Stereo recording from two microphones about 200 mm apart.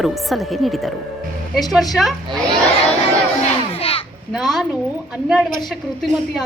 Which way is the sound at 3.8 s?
30° left (ahead or behind).